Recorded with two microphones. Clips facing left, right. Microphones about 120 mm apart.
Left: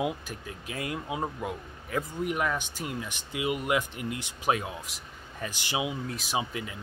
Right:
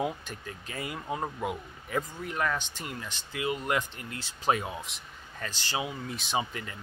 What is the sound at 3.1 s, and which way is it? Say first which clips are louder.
Speech: even; 15° left (ahead or behind).